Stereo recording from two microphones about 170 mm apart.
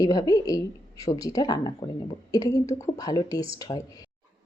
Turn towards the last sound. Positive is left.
turn(degrees=20)  # may be behind; listen again after turning